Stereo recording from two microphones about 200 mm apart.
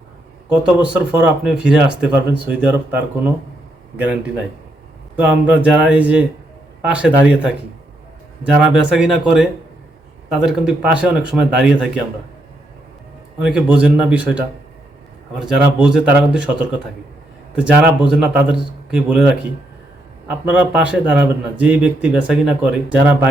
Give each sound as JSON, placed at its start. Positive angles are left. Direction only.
{"t": 0.4, "sound": "speech", "side_deg": -5}
{"t": 5.5, "sound": "speech", "side_deg": -5}
{"t": 8.5, "sound": "speech", "side_deg": -5}
{"t": 13.4, "sound": "speech", "side_deg": -5}
{"t": 17.5, "sound": "speech", "side_deg": -5}